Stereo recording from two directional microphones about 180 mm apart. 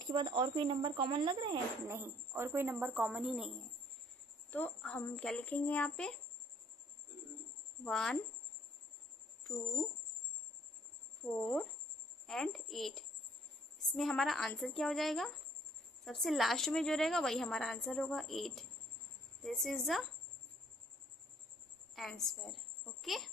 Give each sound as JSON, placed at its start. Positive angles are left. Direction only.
{"t": 0.1, "sound": "speech", "side_deg": -25}
{"t": 2.0, "sound": "a woman's voice", "side_deg": -15}
{"t": 4.5, "sound": "speech", "side_deg": 10}
{"t": 7.9, "sound": "a woman's voice", "side_deg": 5}
{"t": 11.3, "sound": "a woman's voice", "side_deg": 5}
{"t": 21.9, "sound": "a woman's voice", "side_deg": 0}